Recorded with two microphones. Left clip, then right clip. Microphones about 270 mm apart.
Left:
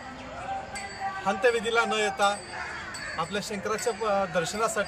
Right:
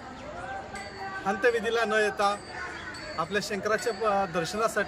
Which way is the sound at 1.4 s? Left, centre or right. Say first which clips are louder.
Left 1 dB; centre.